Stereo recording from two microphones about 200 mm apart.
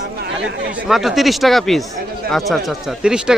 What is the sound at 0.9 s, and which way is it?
Speech, centre (ahead or behind).